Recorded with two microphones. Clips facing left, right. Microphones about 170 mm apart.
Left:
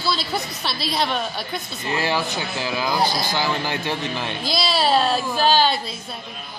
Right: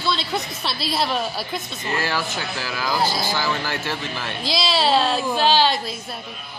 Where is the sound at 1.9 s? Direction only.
15° left (ahead or behind).